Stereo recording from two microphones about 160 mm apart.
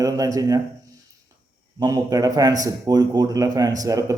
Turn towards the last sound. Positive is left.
turn(degrees=-20)  # may be behind; listen again after turning